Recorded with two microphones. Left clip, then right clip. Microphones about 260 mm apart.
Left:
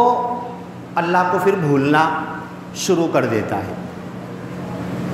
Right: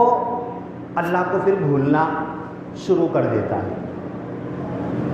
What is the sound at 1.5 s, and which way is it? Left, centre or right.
Speech, left.